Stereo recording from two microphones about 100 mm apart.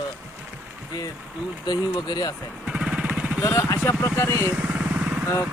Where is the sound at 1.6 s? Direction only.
40° left (ahead or behind).